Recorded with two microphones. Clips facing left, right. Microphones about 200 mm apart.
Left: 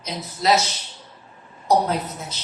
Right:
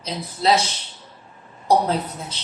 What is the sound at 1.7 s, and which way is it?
Speech, 30° right (ahead or behind).